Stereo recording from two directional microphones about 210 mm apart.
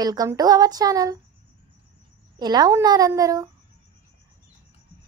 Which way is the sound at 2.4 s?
20° right (ahead or behind).